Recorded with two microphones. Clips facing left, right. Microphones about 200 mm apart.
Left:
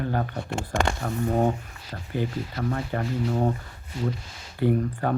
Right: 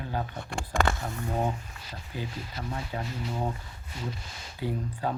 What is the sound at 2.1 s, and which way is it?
Speech, 55° left (ahead or behind).